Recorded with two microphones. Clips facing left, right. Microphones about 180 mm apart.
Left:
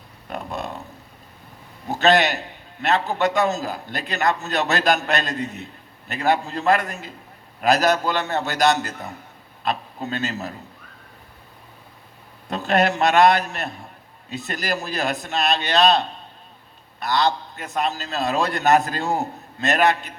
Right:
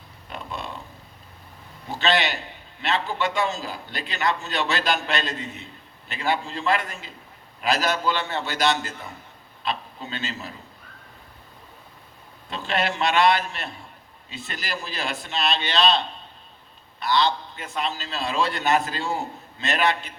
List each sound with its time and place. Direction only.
0.3 s a sound: 45° left (ahead or behind)
1.9 s a man's voice: 45° left (ahead or behind)
12.5 s a man's voice: 45° left (ahead or behind)